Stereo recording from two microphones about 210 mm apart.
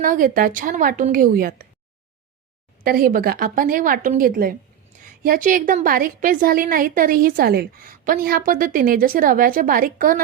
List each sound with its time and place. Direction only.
0.0 s a woman's voice: 40° right (ahead or behind)
2.8 s a woman's voice: 45° right (ahead or behind)